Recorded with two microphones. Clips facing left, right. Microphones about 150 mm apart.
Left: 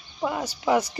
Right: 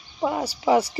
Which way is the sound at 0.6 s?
10° right (ahead or behind).